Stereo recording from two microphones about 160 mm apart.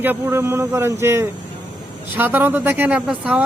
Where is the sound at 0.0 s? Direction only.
15° right (ahead or behind).